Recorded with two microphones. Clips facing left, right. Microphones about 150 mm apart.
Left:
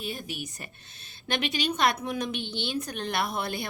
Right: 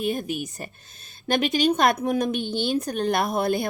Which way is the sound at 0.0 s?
50° right (ahead or behind).